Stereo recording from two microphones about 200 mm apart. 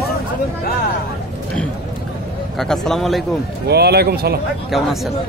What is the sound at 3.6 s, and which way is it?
Speech, 55° right (ahead or behind).